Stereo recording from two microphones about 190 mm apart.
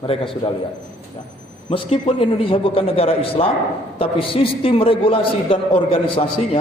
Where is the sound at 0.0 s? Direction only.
30° left (ahead or behind).